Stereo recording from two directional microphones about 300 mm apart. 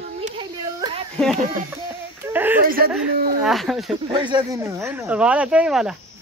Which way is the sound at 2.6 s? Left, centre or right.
Right.